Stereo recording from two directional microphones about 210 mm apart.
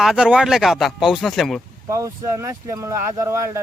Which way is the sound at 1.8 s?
15° right (ahead or behind).